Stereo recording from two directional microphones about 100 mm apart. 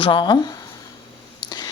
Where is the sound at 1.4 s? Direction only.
45° left (ahead or behind).